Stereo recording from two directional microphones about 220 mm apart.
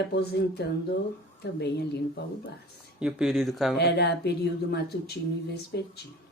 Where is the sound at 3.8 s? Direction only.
50° left (ahead or behind).